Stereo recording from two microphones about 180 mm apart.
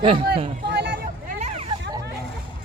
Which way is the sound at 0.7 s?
65° right (ahead or behind).